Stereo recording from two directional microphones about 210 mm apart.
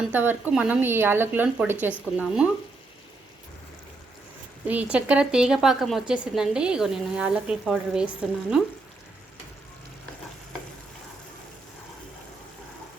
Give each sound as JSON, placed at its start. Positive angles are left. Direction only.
{"t": 0.1, "sound": "a woman's voice", "side_deg": -10}
{"t": 4.6, "sound": "a woman's voice", "side_deg": -5}